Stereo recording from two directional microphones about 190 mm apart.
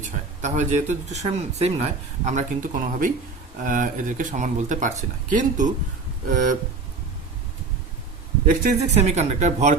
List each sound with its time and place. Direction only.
0.4 s a man's voice: 40° right (ahead or behind)
8.4 s a man's voice: 40° right (ahead or behind)